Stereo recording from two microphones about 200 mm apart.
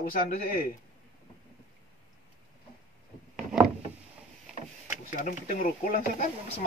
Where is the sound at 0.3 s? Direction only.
40° left (ahead or behind).